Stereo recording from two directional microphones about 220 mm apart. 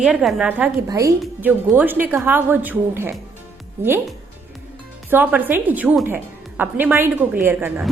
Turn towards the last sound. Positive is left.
turn(degrees=-10)  # may be behind; listen again after turning